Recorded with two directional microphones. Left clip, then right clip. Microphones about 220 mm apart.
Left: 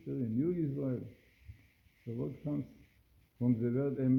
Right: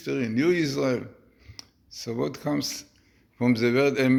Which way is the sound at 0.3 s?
15° right (ahead or behind).